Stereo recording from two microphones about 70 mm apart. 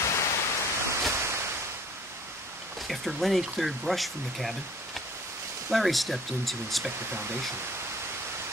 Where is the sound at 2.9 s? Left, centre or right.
Centre.